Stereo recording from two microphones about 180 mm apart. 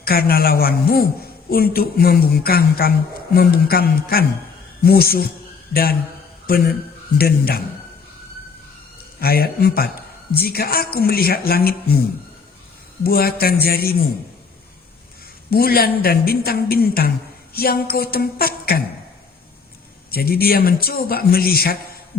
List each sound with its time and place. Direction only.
0.0 s a woman's voice: 55° left (ahead or behind)
9.2 s a woman's voice: 60° left (ahead or behind)
13.0 s a woman's voice: 55° left (ahead or behind)
15.4 s a woman's voice: 55° left (ahead or behind)
20.1 s a woman's voice: 55° left (ahead or behind)